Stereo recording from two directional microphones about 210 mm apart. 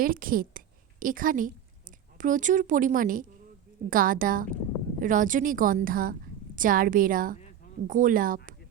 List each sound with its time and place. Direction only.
0.0 s a woman's voice: 40° right (ahead or behind)